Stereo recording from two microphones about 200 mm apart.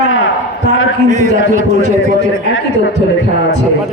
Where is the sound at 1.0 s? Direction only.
40° right (ahead or behind).